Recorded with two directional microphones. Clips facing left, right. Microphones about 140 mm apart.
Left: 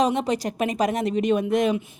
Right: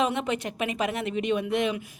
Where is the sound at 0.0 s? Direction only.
35° left (ahead or behind).